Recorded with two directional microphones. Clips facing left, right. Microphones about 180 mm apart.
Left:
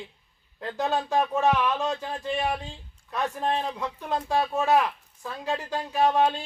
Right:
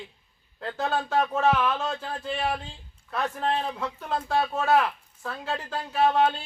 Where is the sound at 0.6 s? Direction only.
15° left (ahead or behind).